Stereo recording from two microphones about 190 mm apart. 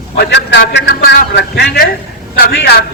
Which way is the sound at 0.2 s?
60° left (ahead or behind).